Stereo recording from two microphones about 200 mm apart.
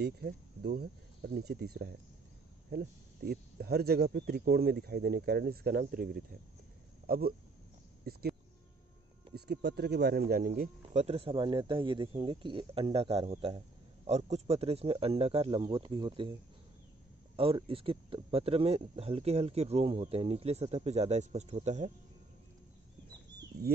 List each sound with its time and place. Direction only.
0.0 s speech: 55° right (ahead or behind)
8.0 s a sound: 50° right (ahead or behind)
9.3 s speech: 55° right (ahead or behind)
11.0 s a man's voice: 30° right (ahead or behind)
17.4 s speech: 25° right (ahead or behind)